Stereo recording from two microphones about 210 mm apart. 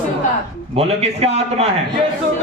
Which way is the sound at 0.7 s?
30° right (ahead or behind).